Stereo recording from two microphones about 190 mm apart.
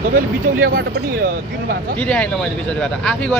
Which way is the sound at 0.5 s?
50° right (ahead or behind).